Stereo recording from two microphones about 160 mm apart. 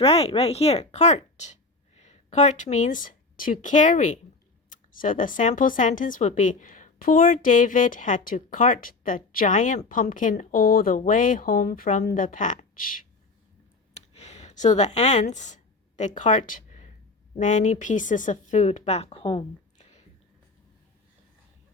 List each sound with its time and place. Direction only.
0.0 s a woman's voice: 35° left (ahead or behind); by 13.1 s 60° left (ahead or behind)
13.9 s clicking: 40° left (ahead or behind)
14.9 s a woman's voice: 45° left (ahead or behind)